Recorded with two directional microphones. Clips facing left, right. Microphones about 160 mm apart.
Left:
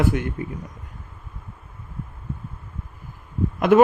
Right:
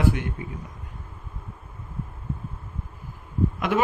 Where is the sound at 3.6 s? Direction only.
50° left (ahead or behind).